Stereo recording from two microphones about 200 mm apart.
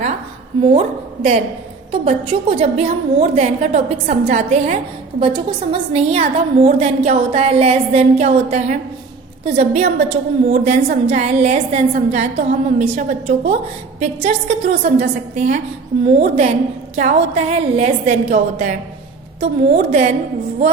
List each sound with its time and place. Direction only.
0.7 s a woman's voice: 30° right (ahead or behind)